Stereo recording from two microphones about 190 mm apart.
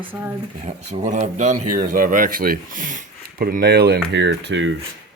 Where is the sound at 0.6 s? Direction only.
40° right (ahead or behind).